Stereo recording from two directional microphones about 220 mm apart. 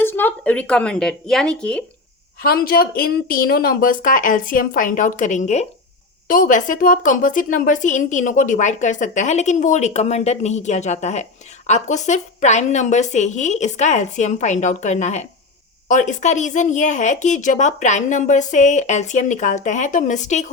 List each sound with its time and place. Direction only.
0.0 s speech: 10° left (ahead or behind)
2.4 s a woman's voice: 45° left (ahead or behind)